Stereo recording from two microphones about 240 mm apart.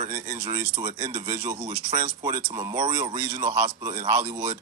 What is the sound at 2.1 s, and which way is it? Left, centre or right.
Speech, centre.